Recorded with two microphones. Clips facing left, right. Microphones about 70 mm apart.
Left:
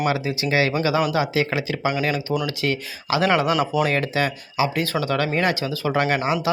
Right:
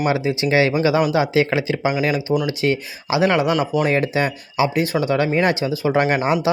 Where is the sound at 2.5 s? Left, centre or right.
Right.